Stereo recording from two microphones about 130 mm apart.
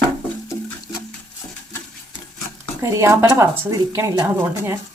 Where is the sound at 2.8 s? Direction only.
20° right (ahead or behind).